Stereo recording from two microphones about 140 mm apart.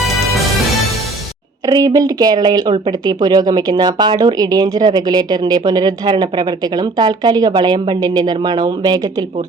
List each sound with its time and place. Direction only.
1.6 s speech: 25° right (ahead or behind)